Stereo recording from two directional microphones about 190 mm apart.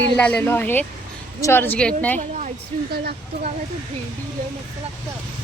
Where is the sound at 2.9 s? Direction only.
55° right (ahead or behind).